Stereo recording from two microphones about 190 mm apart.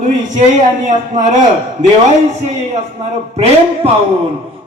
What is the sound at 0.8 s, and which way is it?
Speech, 40° right (ahead or behind).